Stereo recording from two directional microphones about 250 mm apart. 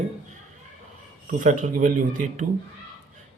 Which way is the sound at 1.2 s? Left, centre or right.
Right.